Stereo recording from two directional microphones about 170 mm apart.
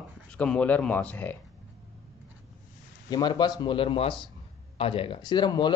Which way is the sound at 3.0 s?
25° left (ahead or behind).